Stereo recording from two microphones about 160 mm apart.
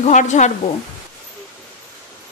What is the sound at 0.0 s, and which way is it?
Speech, 50° left (ahead or behind).